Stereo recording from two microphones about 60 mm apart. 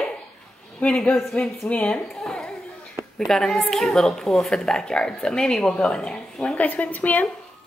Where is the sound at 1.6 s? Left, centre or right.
Left.